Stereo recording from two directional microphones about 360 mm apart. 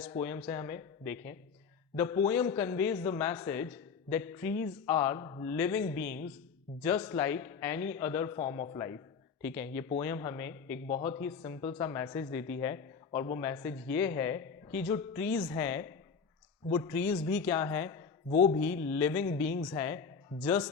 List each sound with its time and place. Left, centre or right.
0.0 s speech: centre
9.4 s music: centre
10.0 s speech: centre
18.3 s mantra: centre
18.9 s music: centre
19.7 s speech: centre